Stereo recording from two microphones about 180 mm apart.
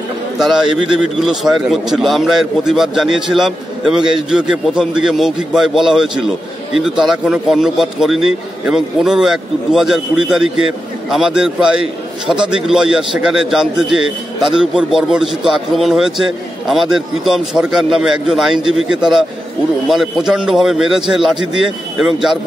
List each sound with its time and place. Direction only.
0.4 s a man's voice: 5° right (ahead or behind)